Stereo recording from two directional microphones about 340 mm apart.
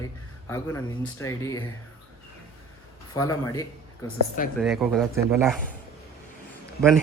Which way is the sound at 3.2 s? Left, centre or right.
Centre.